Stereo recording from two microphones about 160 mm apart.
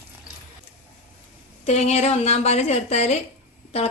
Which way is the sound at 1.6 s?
45° left (ahead or behind).